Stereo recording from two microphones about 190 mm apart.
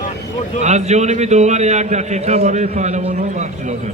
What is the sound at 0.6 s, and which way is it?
A man's voice, 35° right (ahead or behind).